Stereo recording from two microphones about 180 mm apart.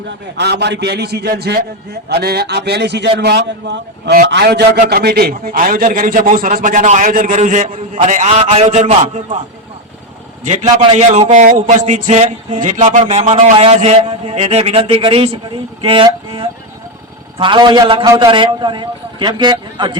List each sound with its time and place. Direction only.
0.1 s a man's voice: 70° right (ahead or behind); by 9.4 s 35° right (ahead or behind)
10.4 s a man's voice: 40° right (ahead or behind); by 20.0 s 25° right (ahead or behind)